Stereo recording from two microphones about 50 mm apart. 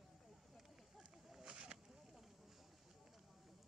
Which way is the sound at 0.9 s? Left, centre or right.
Centre.